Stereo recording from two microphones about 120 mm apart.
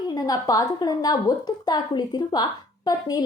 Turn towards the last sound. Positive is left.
turn(degrees=35)  # may be behind; listen again after turning